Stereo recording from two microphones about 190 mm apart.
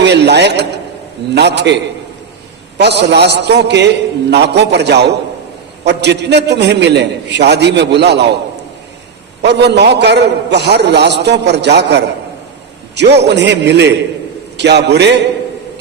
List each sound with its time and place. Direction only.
0.0 s a man's voice: 65° right (ahead or behind)
9.4 s a man's voice: 60° right (ahead or behind)